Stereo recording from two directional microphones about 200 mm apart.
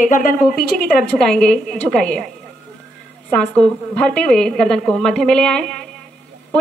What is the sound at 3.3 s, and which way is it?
A woman's voice, 5° left (ahead or behind).